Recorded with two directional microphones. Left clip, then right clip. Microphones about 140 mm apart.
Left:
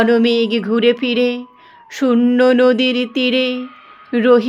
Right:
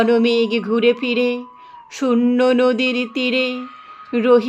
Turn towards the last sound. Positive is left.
turn(degrees=25)  # may be behind; listen again after turning